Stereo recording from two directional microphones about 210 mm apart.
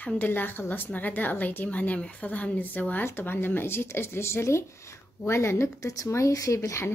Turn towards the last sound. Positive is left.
turn(degrees=15)  # may be behind; listen again after turning